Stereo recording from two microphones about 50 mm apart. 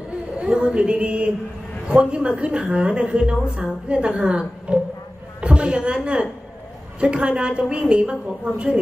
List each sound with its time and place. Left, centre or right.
0.4 s a woman's voice: centre